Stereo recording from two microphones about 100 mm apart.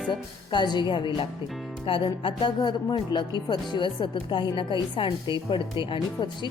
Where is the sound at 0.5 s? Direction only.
45° left (ahead or behind).